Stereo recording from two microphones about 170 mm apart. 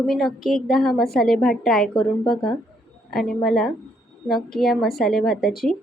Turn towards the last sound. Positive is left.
turn(degrees=0)  # may be behind; listen again after turning